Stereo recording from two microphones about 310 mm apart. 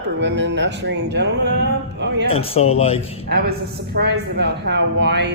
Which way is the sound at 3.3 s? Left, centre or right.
Right.